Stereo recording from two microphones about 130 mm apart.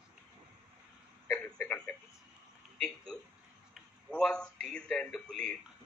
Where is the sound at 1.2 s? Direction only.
10° left (ahead or behind).